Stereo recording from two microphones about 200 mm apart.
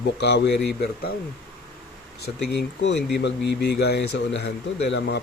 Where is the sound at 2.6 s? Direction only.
60° left (ahead or behind).